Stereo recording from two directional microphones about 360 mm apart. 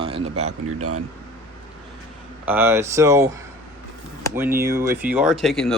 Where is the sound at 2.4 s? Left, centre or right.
Centre.